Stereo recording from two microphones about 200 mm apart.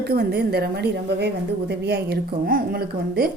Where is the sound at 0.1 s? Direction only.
50° right (ahead or behind).